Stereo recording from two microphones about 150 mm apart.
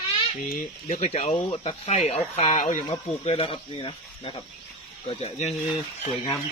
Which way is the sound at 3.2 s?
40° left (ahead or behind).